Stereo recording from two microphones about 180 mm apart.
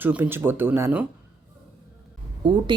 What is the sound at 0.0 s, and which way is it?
Speech, 10° right (ahead or behind).